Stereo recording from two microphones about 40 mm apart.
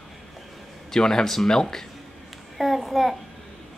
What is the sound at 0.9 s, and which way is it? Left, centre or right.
Speech, centre.